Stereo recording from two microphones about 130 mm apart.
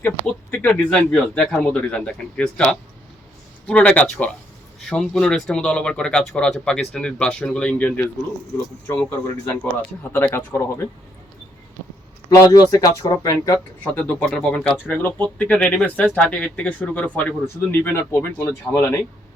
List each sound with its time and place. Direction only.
0.5 s speech: 10° left (ahead or behind)
10.0 s speech: 15° left (ahead or behind)
12.3 s speech: 25° left (ahead or behind)
13.8 s speech: 15° left (ahead or behind)